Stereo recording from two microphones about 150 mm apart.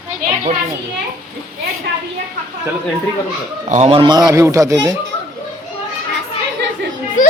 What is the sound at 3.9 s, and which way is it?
Speech, 30° right (ahead or behind).